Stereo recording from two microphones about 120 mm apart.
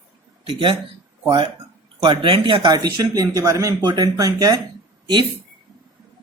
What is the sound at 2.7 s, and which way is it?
Speech, 30° right (ahead or behind).